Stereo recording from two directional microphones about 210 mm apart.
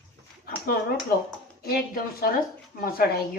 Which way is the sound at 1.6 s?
45° left (ahead or behind).